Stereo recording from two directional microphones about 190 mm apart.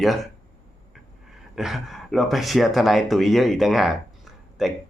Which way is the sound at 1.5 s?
Centre (ahead or behind).